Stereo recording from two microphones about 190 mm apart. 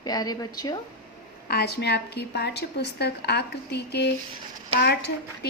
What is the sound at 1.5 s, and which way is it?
A woman's voice, 60° left (ahead or behind).